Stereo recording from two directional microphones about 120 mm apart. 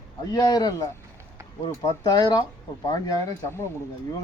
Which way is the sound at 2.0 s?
35° left (ahead or behind).